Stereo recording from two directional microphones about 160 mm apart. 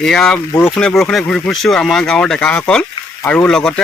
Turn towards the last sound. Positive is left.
turn(degrees=5)  # may be behind; listen again after turning